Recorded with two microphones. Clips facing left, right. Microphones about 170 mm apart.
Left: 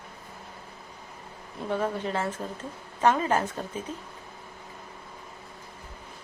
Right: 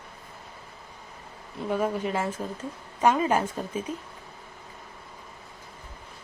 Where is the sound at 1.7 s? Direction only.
10° right (ahead or behind).